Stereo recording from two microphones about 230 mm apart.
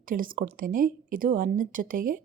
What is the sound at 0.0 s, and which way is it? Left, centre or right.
A woman's voice, right.